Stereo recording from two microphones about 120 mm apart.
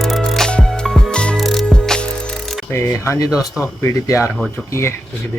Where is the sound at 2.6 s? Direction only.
20° left (ahead or behind).